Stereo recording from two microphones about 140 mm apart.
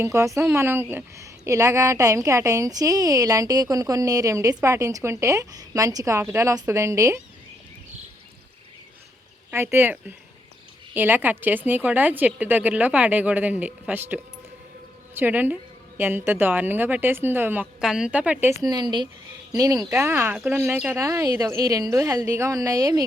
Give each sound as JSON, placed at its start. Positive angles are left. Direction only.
{"t": 0.0, "sound": "a woman's voice", "side_deg": -20}
{"t": 9.7, "sound": "a woman's voice", "side_deg": -15}
{"t": 18.6, "sound": "a woman's voice", "side_deg": -30}